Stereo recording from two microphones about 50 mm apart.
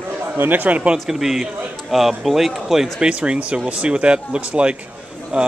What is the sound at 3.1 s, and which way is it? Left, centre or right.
Speech, right.